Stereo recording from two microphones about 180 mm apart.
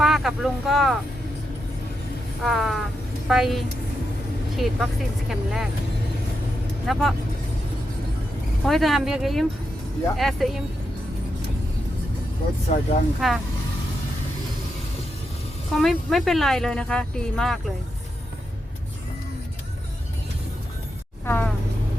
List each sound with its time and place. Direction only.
0.0 s speech: centre (ahead or behind)
2.4 s speech: centre (ahead or behind)
6.9 s speech: centre (ahead or behind)
8.6 s speech: centre (ahead or behind)
12.7 s speech: 35° left (ahead or behind)
13.2 s speech: centre (ahead or behind)
15.7 s speech: centre (ahead or behind)
21.2 s a sound: 10° left (ahead or behind)